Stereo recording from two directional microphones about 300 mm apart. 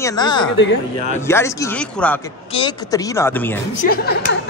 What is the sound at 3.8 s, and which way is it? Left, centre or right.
Speech, left.